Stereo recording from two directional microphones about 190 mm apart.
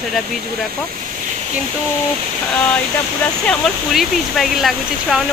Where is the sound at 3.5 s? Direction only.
Centre (ahead or behind).